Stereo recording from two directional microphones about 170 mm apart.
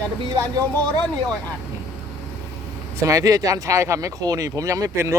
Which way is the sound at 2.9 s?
20° right (ahead or behind).